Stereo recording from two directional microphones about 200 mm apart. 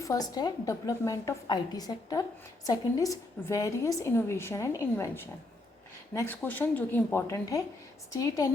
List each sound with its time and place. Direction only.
0.0 s a woman's voice: 20° left (ahead or behind)